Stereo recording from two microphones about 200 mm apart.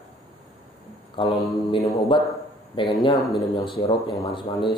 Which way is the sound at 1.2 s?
25° left (ahead or behind).